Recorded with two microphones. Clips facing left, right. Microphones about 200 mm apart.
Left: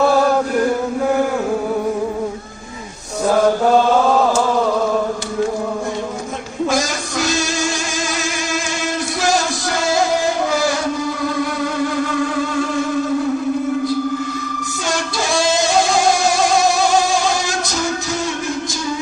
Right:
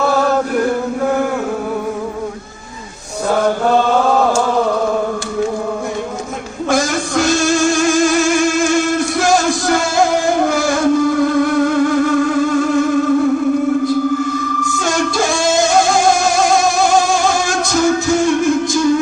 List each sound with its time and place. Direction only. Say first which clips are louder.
6.7 s music: right 6 dB; 55° right (ahead or behind)
14.3 s music: right 6 dB; 50° right (ahead or behind)
17.3 s music: right 5 dB; 50° right (ahead or behind)